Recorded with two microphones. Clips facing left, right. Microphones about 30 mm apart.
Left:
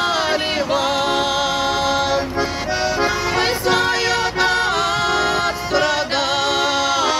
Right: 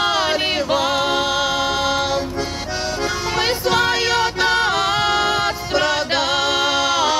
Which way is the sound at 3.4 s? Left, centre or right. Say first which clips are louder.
Right 1 dB; centre.